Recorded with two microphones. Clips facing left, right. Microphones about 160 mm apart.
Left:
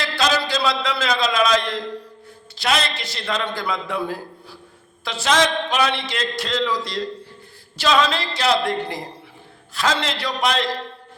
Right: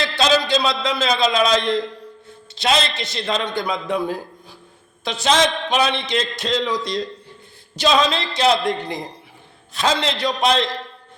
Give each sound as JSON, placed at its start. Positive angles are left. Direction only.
{"t": 0.0, "sound": "a man's voice", "side_deg": -20}